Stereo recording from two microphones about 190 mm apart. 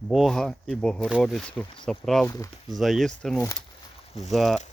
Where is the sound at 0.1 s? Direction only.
Centre (ahead or behind).